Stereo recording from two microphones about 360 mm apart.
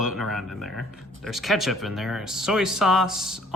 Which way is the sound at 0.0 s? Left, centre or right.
Centre.